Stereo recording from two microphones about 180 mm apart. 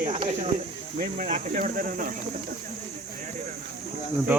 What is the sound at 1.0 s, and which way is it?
Speech, 45° right (ahead or behind).